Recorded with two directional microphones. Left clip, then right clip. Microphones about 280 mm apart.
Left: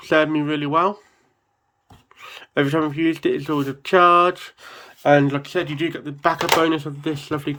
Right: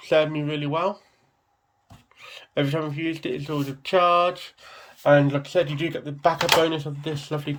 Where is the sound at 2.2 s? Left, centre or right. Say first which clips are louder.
Left 5 dB; centre.